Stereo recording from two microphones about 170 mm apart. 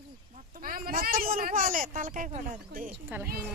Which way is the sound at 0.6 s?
55° right (ahead or behind).